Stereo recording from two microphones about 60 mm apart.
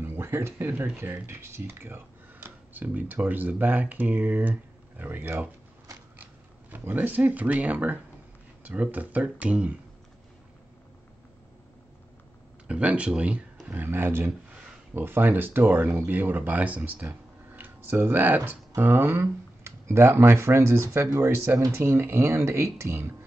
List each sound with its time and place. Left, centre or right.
0.0 s speech: right
6.7 s speech: right
12.6 s speech: right
13.7 s speech: right